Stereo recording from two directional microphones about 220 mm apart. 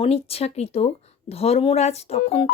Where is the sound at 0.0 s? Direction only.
25° left (ahead or behind).